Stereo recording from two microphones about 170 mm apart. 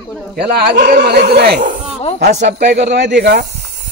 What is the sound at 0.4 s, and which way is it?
Speech, 70° right (ahead or behind).